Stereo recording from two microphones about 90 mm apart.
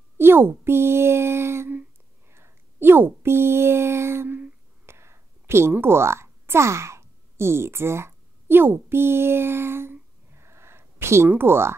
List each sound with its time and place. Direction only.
0.2 s speech: 25° right (ahead or behind)
4.8 s a sound: 30° right (ahead or behind)
11.2 s speech: 25° right (ahead or behind)